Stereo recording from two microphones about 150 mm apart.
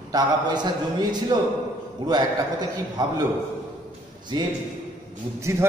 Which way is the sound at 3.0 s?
25° right (ahead or behind).